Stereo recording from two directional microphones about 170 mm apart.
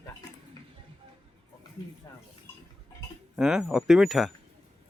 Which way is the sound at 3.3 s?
5° right (ahead or behind).